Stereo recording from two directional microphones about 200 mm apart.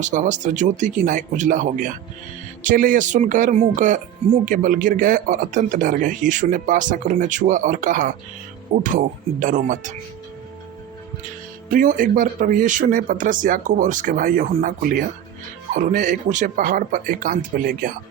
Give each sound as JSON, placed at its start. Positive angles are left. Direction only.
{"t": 0.0, "sound": "speech", "side_deg": -40}
{"t": 11.7, "sound": "speech", "side_deg": -40}